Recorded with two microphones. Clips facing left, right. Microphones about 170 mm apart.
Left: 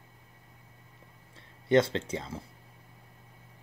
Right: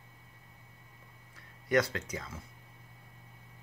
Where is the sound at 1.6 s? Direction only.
25° left (ahead or behind).